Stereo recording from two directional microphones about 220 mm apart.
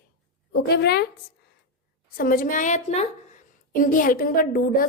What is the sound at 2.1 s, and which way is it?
A woman's voice, 40° left (ahead or behind).